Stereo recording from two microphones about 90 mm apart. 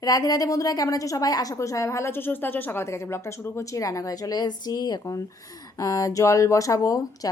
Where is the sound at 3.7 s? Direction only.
40° left (ahead or behind).